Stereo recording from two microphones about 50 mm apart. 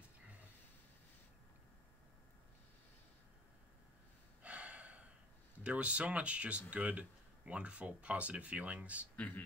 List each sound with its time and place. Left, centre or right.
4.4 s gasp: right
5.6 s speech: right
9.1 s speech: left